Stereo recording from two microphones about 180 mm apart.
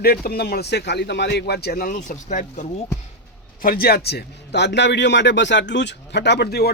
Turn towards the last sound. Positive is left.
turn(degrees=65)  # may be behind; listen again after turning